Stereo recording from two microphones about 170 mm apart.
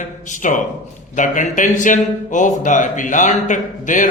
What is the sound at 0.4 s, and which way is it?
Speech, 45° left (ahead or behind).